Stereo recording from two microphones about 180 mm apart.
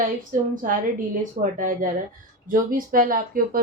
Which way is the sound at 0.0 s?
50° right (ahead or behind).